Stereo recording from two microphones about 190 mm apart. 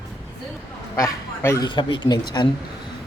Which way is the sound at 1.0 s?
15° left (ahead or behind).